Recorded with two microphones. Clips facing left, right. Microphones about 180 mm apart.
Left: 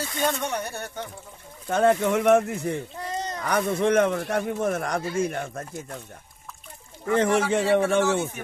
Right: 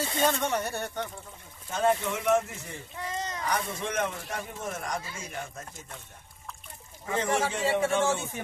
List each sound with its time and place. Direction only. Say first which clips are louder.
0.2 s speech: even; centre (ahead or behind)
1.7 s speech: left 6 dB; 65° left (ahead or behind)
3.1 s a sound: left 3 dB; 35° left (ahead or behind)
3.4 s speech: left 11 dB; 65° left (ahead or behind)
7.1 s speech: left 7 dB; 65° left (ahead or behind)